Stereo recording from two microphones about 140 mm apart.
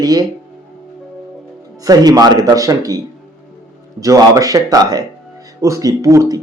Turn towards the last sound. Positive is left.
turn(degrees=-20)  # may be behind; listen again after turning